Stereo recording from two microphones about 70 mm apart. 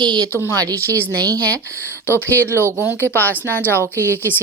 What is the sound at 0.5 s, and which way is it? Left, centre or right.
Speech, right.